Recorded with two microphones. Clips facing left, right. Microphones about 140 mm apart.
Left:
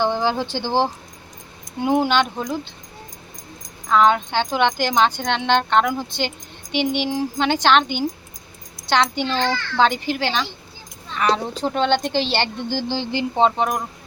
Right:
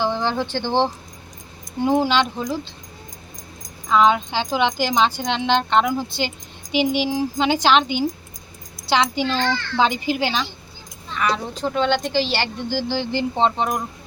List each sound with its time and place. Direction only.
0.0 s speech: 5° left (ahead or behind)
3.8 s speech: 5° right (ahead or behind)
11.2 s a woman's voice: 35° left (ahead or behind); by 13.5 s 15° left (ahead or behind)
13.6 s speech: centre (ahead or behind)